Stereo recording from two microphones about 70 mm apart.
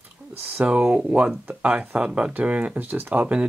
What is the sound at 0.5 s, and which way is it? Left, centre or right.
Speech, centre.